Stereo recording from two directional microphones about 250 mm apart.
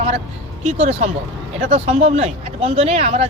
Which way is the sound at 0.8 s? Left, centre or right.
Right.